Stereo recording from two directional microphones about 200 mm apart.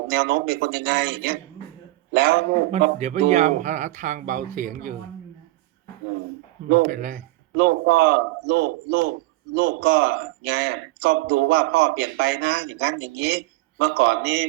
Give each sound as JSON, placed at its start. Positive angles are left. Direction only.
{"t": 0.1, "sound": "a man's voice", "side_deg": -55}
{"t": 3.0, "sound": "speech", "side_deg": -35}
{"t": 6.7, "sound": "speech", "side_deg": -40}
{"t": 7.5, "sound": "a man's voice", "side_deg": -55}